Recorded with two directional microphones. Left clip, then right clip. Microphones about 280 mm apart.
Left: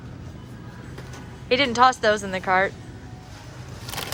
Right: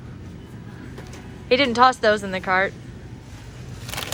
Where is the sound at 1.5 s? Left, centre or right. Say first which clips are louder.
Right 2 dB; centre.